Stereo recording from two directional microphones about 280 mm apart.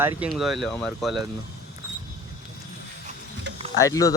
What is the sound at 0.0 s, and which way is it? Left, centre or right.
Speech, centre.